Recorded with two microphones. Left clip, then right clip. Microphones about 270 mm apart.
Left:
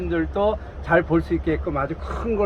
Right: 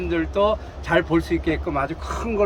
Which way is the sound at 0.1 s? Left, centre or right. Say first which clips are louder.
Right 2 dB; centre.